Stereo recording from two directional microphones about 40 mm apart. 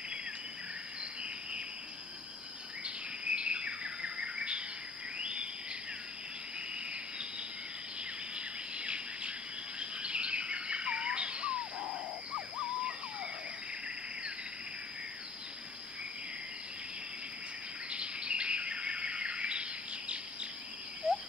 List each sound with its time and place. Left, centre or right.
2.8 s bird vocalization: right
5.2 s a sound: right
6.9 s cricket: right
8.4 s bird: right
17.8 s bird: right
21.0 s a sound: right